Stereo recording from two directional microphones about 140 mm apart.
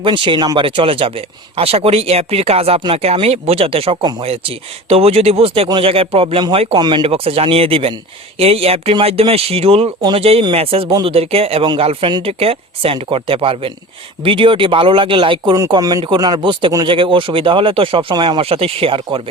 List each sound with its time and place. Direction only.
0.0 s speech: 40° right (ahead or behind)
15.7 s speech: 25° right (ahead or behind)